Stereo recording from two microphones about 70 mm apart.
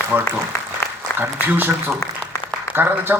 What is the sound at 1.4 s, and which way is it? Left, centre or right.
Speech, right.